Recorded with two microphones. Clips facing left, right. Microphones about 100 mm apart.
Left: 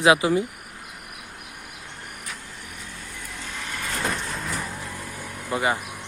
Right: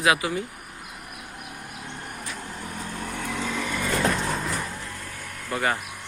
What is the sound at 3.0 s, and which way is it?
Vehicle, 70° right (ahead or behind).